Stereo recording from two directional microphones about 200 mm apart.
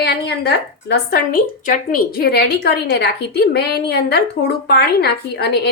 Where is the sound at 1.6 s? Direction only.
45° left (ahead or behind).